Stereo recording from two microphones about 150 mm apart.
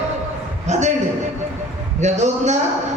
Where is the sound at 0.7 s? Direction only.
50° right (ahead or behind).